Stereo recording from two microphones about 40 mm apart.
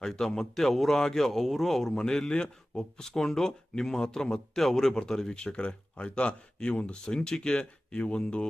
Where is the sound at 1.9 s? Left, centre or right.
Centre.